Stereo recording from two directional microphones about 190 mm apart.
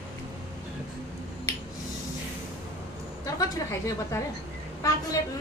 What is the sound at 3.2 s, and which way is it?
A woman's voice, 20° left (ahead or behind).